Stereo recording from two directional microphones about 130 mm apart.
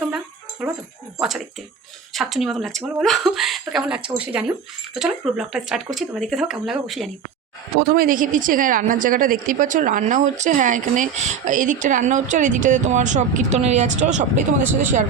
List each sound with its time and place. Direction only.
0.6 s speech: 5° right (ahead or behind)
2.1 s speech: centre (ahead or behind)
7.9 s a woman's voice: 90° right; by 14.4 s 65° right (ahead or behind)
14.8 s speech: 75° right (ahead or behind)